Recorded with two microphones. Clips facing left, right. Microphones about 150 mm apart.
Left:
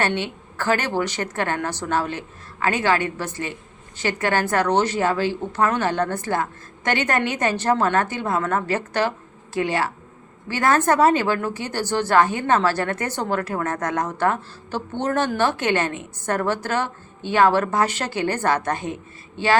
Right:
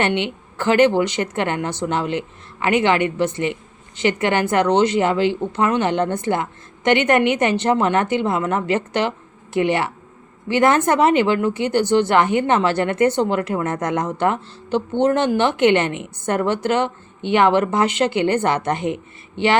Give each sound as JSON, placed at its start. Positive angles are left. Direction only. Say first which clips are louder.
{"t": 0.0, "sound": "a woman's voice", "louder": "right 3 dB", "side_deg": -20}